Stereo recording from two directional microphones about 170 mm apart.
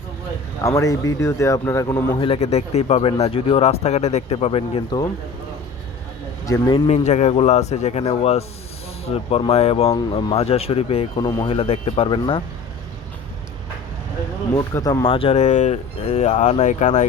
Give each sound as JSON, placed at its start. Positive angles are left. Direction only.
{"t": 0.8, "sound": "speech", "side_deg": 20}
{"t": 2.1, "sound": "speech", "side_deg": 35}
{"t": 6.4, "sound": "speech", "side_deg": 25}
{"t": 6.9, "sound": "speech", "side_deg": 40}
{"t": 14.5, "sound": "speech", "side_deg": 20}
{"t": 15.0, "sound": "speech", "side_deg": 30}